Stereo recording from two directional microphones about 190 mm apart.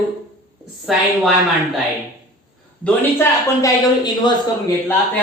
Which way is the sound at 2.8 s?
15° left (ahead or behind).